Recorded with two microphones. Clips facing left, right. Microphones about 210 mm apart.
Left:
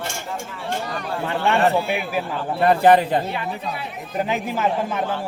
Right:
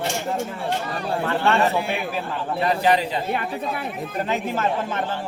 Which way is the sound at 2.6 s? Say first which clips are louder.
Left 6 dB; 55° left (ahead or behind).